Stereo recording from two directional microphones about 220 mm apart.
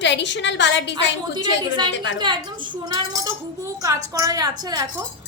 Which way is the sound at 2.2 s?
20° right (ahead or behind).